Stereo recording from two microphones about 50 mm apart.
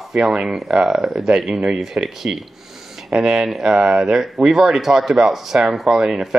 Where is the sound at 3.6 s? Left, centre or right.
Right.